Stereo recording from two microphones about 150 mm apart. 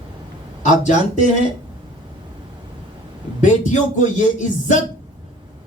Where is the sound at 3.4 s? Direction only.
55° left (ahead or behind).